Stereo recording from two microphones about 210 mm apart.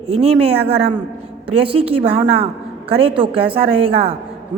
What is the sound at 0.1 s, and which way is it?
A woman's voice, 30° right (ahead or behind).